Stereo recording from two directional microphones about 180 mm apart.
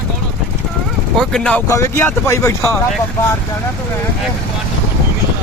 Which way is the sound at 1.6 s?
15° left (ahead or behind).